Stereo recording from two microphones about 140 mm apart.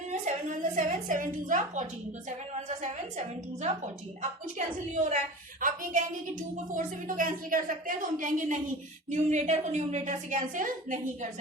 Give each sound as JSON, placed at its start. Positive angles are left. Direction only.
{"t": 0.1, "sound": "a sound", "side_deg": -60}
{"t": 2.6, "sound": "a woman's voice", "side_deg": -55}
{"t": 9.0, "sound": "a woman's voice", "side_deg": -55}